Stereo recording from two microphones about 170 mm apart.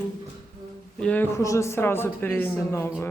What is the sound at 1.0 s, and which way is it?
A woman's voice, 10° left (ahead or behind).